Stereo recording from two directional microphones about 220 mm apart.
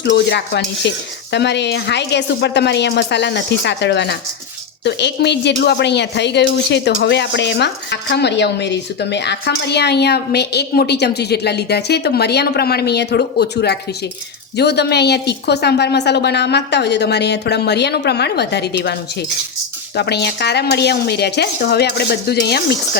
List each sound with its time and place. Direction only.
0.0 s speech: 50° left (ahead or behind)
20.0 s speech: 50° left (ahead or behind)